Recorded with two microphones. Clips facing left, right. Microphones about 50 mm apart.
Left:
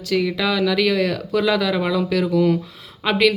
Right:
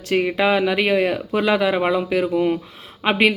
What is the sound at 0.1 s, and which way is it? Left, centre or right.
A woman's voice, right.